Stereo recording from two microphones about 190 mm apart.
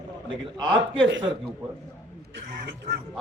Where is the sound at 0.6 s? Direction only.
25° right (ahead or behind).